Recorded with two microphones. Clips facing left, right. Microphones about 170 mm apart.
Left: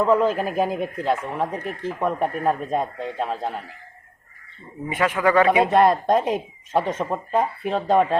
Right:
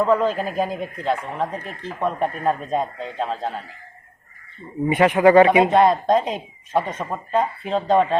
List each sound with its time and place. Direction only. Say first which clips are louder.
0.1 s speech: even; 10° left (ahead or behind)
4.9 s a man's voice: right 6 dB; 20° right (ahead or behind)
5.7 s speech: right 1 dB; 5° left (ahead or behind)